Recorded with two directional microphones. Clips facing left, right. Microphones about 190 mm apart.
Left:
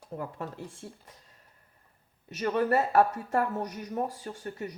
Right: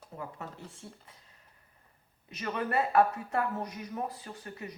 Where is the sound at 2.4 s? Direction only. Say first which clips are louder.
Left 5 dB; 40° left (ahead or behind).